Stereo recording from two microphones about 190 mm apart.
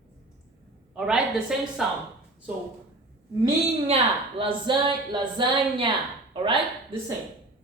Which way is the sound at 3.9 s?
30° right (ahead or behind).